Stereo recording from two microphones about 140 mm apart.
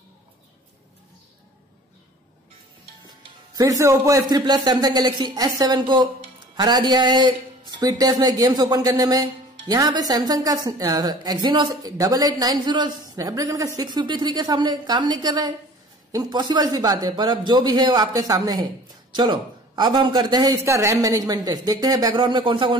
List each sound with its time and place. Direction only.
3.5 s a woman's voice: 20° right (ahead or behind)
20.5 s a woman's voice: 20° right (ahead or behind); by 22.8 s 35° right (ahead or behind)